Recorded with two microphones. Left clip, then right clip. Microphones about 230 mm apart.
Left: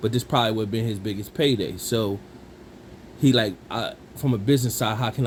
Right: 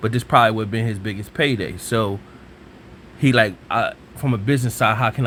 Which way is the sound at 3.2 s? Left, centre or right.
Right.